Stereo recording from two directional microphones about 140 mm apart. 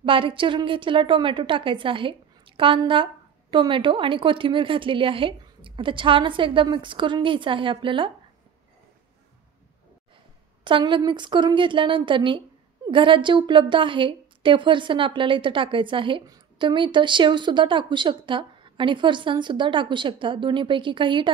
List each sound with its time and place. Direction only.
0.0 s a woman's voice: 40° right (ahead or behind)
10.6 s a woman's voice: 35° right (ahead or behind)